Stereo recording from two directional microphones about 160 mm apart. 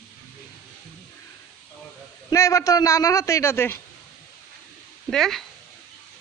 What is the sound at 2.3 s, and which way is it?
A man's voice, 20° left (ahead or behind).